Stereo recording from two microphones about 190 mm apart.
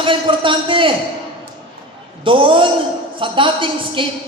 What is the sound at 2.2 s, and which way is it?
Speech, 25° right (ahead or behind).